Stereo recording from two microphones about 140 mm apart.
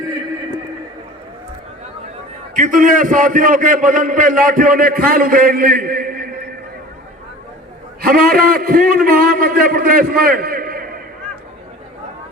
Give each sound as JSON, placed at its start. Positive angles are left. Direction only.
{"t": 2.6, "sound": "a man's voice", "side_deg": -70}
{"t": 8.0, "sound": "a man's voice", "side_deg": -90}